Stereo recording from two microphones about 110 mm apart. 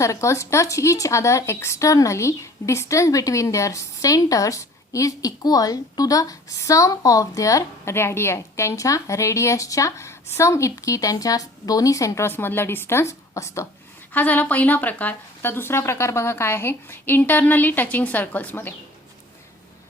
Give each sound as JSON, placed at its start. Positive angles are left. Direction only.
{"t": 0.0, "sound": "a woman's voice", "side_deg": 25}
{"t": 14.1, "sound": "a woman's voice", "side_deg": 15}